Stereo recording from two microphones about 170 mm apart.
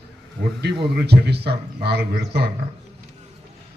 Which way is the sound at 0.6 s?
75° right (ahead or behind).